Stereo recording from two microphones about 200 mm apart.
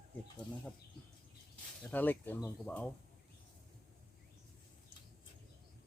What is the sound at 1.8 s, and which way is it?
Speech, 10° left (ahead or behind).